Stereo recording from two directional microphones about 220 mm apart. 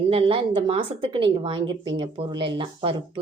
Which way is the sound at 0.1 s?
25° right (ahead or behind).